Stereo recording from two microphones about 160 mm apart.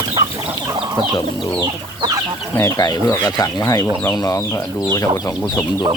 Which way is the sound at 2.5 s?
20° left (ahead or behind).